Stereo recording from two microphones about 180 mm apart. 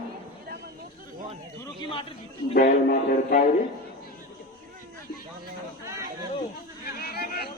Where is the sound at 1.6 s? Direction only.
25° left (ahead or behind).